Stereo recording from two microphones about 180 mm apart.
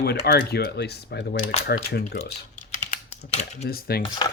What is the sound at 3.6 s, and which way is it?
Speech, 60° left (ahead or behind).